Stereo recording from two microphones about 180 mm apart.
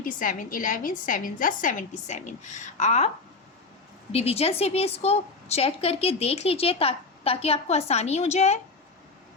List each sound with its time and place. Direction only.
0.0 s a woman's voice: 45° left (ahead or behind)
4.1 s a woman's voice: 35° left (ahead or behind)